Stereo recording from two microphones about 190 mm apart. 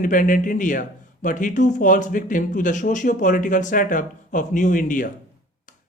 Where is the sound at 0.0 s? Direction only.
45° left (ahead or behind).